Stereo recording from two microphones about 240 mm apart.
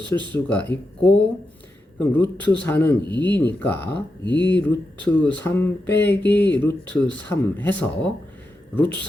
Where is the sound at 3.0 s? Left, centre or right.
Centre.